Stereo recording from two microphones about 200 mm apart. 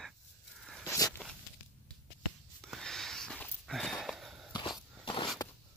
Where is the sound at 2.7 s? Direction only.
Centre (ahead or behind).